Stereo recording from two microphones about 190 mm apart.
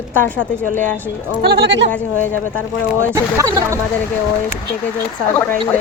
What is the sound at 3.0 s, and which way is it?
Speech, 15° right (ahead or behind).